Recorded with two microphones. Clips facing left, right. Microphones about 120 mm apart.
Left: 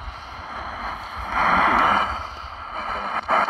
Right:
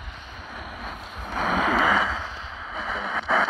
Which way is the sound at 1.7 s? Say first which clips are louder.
Left 2 dB; 50° left (ahead or behind).